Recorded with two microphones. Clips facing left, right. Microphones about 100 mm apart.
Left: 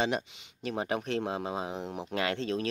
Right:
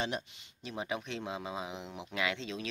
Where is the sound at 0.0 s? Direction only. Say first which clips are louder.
Left 6 dB; 90° left.